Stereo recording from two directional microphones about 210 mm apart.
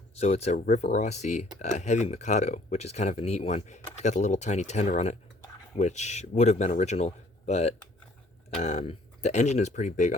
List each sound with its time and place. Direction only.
0.2 s speech: 30° left (ahead or behind)